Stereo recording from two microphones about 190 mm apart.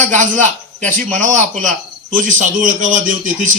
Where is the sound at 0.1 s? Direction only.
40° right (ahead or behind).